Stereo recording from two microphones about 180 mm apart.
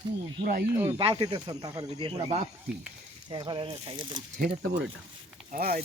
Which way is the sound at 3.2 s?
25° right (ahead or behind).